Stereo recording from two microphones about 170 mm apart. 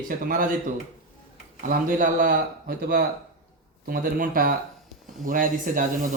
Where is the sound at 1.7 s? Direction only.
50° right (ahead or behind).